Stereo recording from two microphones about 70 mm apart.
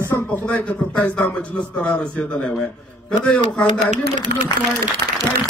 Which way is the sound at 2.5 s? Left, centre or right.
Centre.